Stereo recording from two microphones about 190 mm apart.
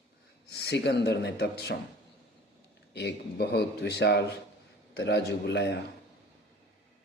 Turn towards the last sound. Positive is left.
turn(degrees=65)  # may be behind; listen again after turning